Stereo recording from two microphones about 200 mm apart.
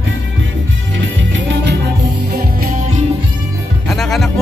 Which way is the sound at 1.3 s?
60° right (ahead or behind).